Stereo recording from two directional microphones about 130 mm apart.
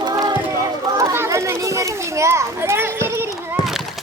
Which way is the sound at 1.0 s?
25° right (ahead or behind).